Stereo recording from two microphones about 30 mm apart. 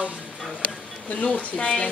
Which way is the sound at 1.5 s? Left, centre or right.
Left.